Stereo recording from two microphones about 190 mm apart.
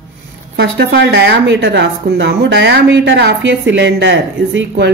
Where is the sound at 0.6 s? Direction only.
65° right (ahead or behind).